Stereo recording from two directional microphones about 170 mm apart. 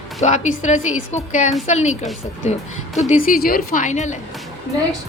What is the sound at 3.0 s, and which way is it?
Speech, 45° left (ahead or behind).